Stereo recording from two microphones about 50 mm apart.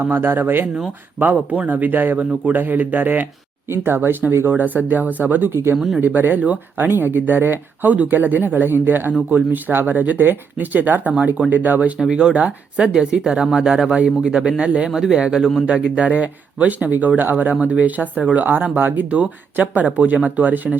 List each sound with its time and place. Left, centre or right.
0.0 s a man's voice: right
4.5 s a man's voice: right
5.7 s speech: centre
6.0 s a man's voice: right
11.9 s speech: centre
12.3 s speech: right; by 13.9 s centre
13.9 s a man's voice: right